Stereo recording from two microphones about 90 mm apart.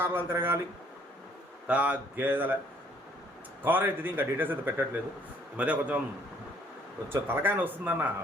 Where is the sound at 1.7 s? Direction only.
15° right (ahead or behind).